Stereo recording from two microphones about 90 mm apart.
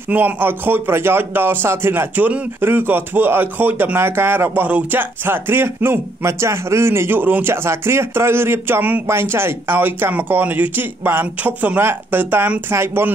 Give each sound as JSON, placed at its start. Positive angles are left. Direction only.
{"t": 0.1, "sound": "speech", "side_deg": -25}